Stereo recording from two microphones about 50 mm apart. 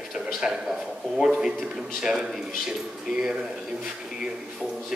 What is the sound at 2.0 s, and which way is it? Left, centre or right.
Speech, centre.